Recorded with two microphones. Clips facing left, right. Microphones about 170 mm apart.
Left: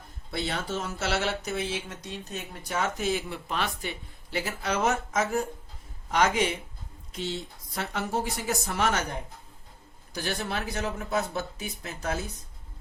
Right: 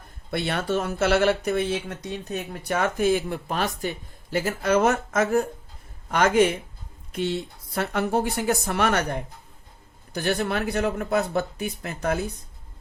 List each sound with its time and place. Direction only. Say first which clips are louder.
0.3 s speech: right 6 dB; 60° right (ahead or behind)